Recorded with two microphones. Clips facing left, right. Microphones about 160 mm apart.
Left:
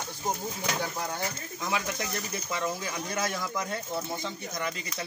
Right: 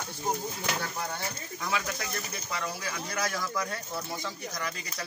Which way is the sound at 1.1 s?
20° left (ahead or behind).